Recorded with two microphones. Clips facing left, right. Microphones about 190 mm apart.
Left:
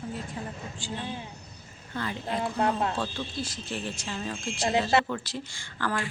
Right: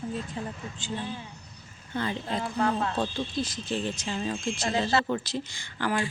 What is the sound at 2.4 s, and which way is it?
Speech, 25° left (ahead or behind).